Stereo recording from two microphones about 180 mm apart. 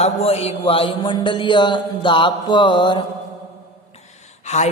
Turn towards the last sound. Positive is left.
turn(degrees=40)  # may be behind; listen again after turning